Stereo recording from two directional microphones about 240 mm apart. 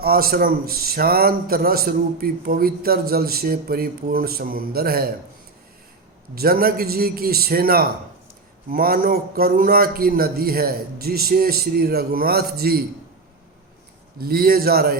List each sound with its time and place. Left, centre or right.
0.0 s a man's voice: right
6.3 s a man's voice: right
14.2 s a man's voice: right